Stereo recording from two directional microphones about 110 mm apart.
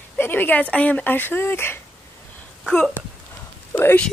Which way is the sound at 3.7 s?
20° left (ahead or behind).